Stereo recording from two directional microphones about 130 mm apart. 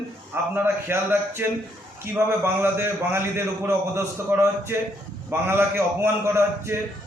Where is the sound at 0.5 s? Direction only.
15° right (ahead or behind).